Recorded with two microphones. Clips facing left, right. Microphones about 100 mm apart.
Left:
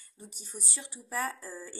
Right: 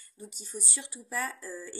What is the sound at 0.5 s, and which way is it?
Speech, 50° left (ahead or behind).